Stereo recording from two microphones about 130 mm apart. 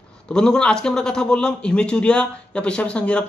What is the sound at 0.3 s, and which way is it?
Speech, 5° left (ahead or behind).